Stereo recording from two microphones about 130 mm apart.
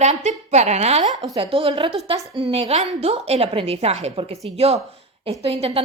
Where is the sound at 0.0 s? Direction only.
60° right (ahead or behind).